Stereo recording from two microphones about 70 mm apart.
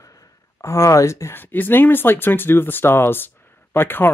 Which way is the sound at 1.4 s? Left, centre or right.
Left.